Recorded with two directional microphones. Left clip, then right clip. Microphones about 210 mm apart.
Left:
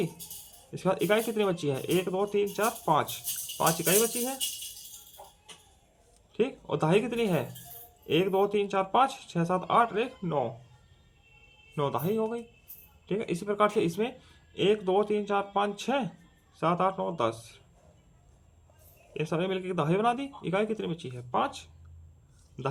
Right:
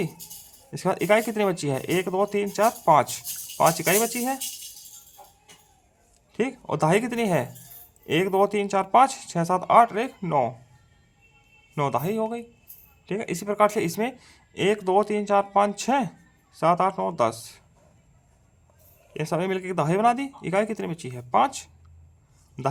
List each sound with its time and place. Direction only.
0.7 s speech: 30° right (ahead or behind)
6.3 s speech: 30° right (ahead or behind)
11.7 s speech: 35° right (ahead or behind)
19.1 s speech: 30° right (ahead or behind)